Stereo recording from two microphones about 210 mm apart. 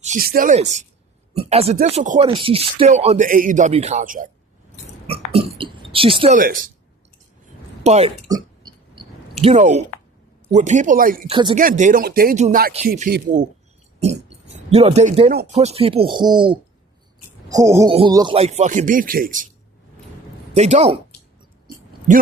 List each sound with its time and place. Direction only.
0.0 s speech: 40° right (ahead or behind)
5.0 s burping: 30° right (ahead or behind)
6.3 s speech: 40° right (ahead or behind)
7.9 s speech: 30° right (ahead or behind)
8.3 s a sound: 20° right (ahead or behind)
9.4 s speech: 30° right (ahead or behind)
11.3 s speech: 20° right (ahead or behind)
11.5 s speech: 35° right (ahead or behind)
20.6 s speech: 30° right (ahead or behind)